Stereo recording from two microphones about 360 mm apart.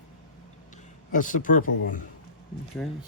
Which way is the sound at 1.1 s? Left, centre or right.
Left.